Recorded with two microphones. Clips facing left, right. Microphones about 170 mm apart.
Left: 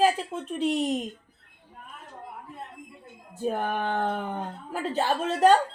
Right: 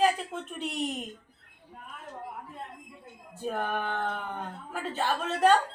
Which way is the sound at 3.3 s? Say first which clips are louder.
Left 3 dB; 40° left (ahead or behind).